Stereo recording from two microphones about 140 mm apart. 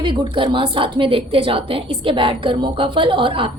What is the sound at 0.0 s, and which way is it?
A woman's voice, 35° right (ahead or behind).